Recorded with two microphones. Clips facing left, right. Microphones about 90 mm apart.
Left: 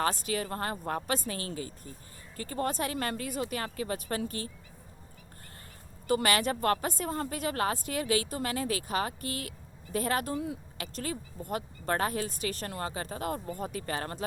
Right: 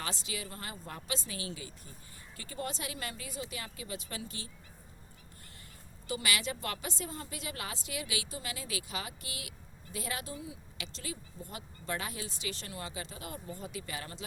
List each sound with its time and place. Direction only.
0.0 s a woman's voice: 50° left (ahead or behind)
6.1 s a woman's voice: 45° left (ahead or behind)